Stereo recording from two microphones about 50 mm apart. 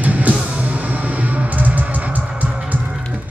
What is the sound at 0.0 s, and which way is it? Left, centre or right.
Music, right.